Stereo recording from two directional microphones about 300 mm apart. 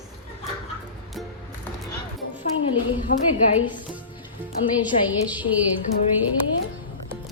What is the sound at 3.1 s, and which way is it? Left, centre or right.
Speech, left.